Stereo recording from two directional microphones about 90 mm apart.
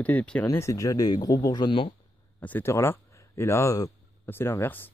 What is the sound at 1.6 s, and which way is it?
Speech, 70° left (ahead or behind).